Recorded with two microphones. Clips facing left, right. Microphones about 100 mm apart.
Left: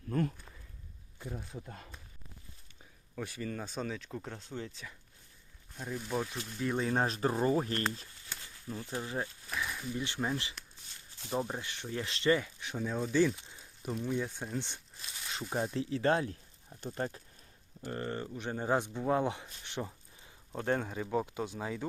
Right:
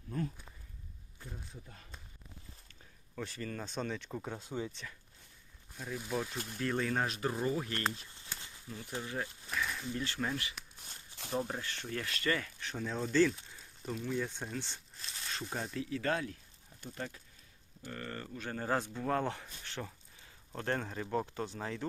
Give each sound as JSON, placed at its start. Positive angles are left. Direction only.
{"t": 0.1, "sound": "speech", "side_deg": 65}
{"t": 3.2, "sound": "speech", "side_deg": 10}
{"t": 5.7, "sound": "speech", "side_deg": 0}
{"t": 6.8, "sound": "speech", "side_deg": 30}
{"t": 9.6, "sound": "a sound", "side_deg": 5}
{"t": 10.0, "sound": "speech", "side_deg": 20}
{"t": 11.3, "sound": "speech", "side_deg": 10}
{"t": 15.7, "sound": "speech", "side_deg": 30}
{"t": 17.9, "sound": "speech", "side_deg": 25}